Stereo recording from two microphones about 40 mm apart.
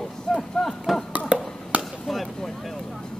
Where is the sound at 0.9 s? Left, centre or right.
Centre.